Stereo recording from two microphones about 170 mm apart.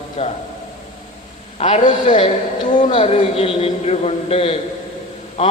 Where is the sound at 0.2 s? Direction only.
35° left (ahead or behind).